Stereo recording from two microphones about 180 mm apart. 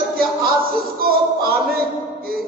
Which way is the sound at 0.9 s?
55° right (ahead or behind).